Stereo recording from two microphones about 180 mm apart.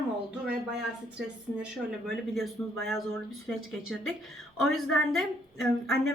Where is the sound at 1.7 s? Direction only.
Centre (ahead or behind).